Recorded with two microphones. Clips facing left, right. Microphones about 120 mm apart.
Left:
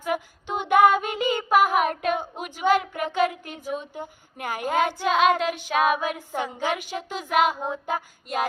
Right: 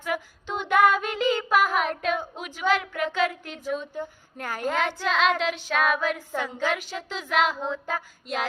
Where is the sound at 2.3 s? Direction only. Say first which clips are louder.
Left 3 dB; 50° left (ahead or behind).